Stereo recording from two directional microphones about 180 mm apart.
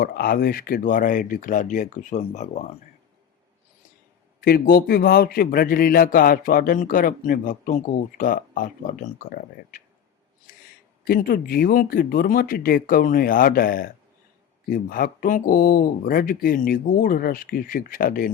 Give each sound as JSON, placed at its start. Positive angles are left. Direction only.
{"t": 0.0, "sound": "speech", "side_deg": 55}
{"t": 4.4, "sound": "speech", "side_deg": 55}
{"t": 11.0, "sound": "speech", "side_deg": 55}